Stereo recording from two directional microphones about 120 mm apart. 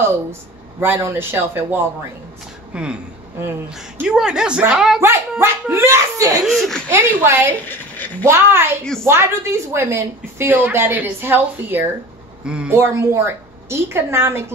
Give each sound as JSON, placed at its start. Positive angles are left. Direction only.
{"t": 0.0, "sound": "a woman's voice", "side_deg": -20}
{"t": 5.4, "sound": "a woman's voice", "side_deg": -20}
{"t": 6.4, "sound": "speech", "side_deg": 0}
{"t": 6.9, "sound": "a woman's voice", "side_deg": -20}
{"t": 7.6, "sound": "a woman's voice", "side_deg": 15}
{"t": 8.3, "sound": "a woman's voice", "side_deg": -20}
{"t": 12.7, "sound": "a woman's voice", "side_deg": -25}